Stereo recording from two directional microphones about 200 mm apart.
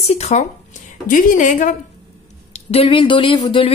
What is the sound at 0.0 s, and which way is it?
A man's voice, 35° left (ahead or behind).